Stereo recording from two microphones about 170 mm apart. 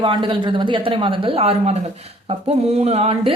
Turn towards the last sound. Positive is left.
turn(degrees=-35)  # may be behind; listen again after turning